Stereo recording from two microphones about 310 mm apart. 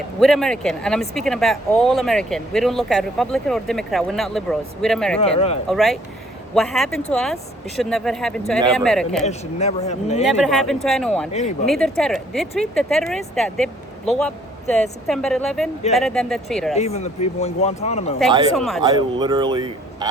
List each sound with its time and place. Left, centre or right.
0.2 s speech: centre
5.2 s speech: centre
5.6 s speech: centre
9.2 s speech: left
10.2 s speech: centre
11.3 s speech: left
11.6 s speech: centre
16.7 s speech: left
18.5 s speech: centre
18.8 s speech: centre